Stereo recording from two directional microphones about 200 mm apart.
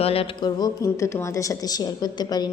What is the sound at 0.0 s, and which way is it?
A woman's voice, 30° left (ahead or behind).